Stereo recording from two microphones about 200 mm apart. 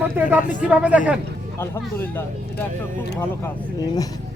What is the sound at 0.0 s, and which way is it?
Speech, 10° right (ahead or behind).